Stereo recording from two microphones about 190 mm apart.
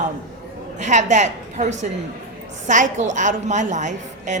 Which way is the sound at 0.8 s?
40° right (ahead or behind).